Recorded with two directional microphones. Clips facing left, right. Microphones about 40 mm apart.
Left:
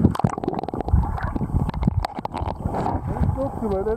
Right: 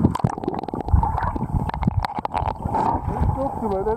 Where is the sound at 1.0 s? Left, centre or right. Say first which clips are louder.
Right 4 dB; centre.